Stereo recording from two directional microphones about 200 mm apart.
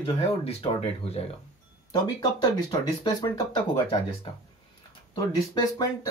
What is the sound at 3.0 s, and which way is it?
Speech, 20° left (ahead or behind).